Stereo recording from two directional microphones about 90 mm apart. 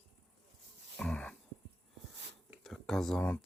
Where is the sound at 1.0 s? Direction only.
10° left (ahead or behind).